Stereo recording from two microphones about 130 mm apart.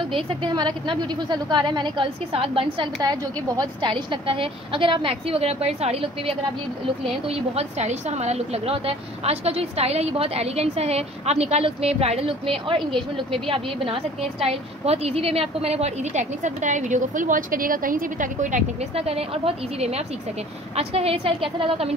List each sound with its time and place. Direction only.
0.0 s a woman's voice: 40° right (ahead or behind)
3.0 s a woman's voice: 30° right (ahead or behind); by 18.6 s 85° right
18.9 s a woman's voice: 50° right (ahead or behind)